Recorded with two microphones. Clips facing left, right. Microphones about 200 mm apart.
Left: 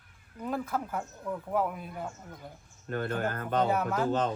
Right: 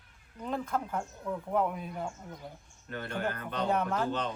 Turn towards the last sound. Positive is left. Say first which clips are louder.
# left 5 dB
turn(degrees=45)  # may be behind; listen again after turning